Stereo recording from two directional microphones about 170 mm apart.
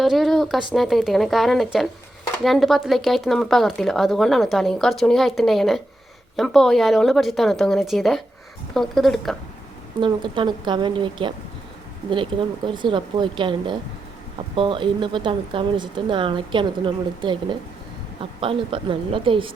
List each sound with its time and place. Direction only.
0.0 s speech: centre (ahead or behind)
10.0 s a woman's voice: 25° right (ahead or behind)